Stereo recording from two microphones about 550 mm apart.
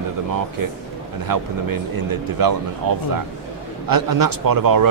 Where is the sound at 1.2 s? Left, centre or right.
Right.